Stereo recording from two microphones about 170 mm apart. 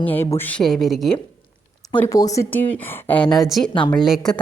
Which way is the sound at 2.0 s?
20° left (ahead or behind).